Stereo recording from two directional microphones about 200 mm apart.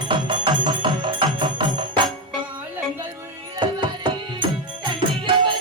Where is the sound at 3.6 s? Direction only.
25° right (ahead or behind).